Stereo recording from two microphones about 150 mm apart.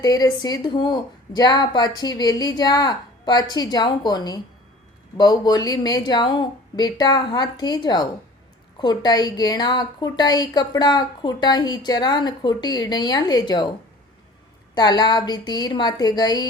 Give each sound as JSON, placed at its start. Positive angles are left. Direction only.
{"t": 0.0, "sound": "a woman's voice", "side_deg": 25}
{"t": 14.8, "sound": "a woman's voice", "side_deg": 30}